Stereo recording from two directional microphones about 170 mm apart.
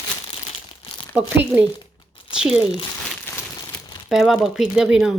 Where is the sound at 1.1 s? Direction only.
10° right (ahead or behind).